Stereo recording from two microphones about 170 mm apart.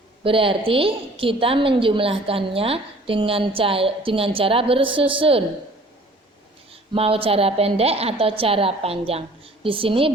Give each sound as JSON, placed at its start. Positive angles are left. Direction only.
{"t": 0.2, "sound": "a woman's voice", "side_deg": -30}
{"t": 6.9, "sound": "a woman's voice", "side_deg": -35}